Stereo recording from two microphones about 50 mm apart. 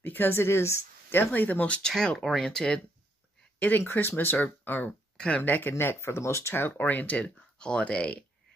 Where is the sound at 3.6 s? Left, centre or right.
Left.